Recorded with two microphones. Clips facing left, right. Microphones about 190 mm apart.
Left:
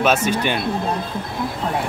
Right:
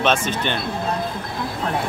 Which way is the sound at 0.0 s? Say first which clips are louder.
Left 2 dB; 10° left (ahead or behind).